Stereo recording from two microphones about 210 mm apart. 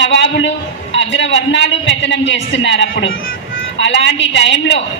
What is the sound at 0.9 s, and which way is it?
A woman's voice, 60° left (ahead or behind).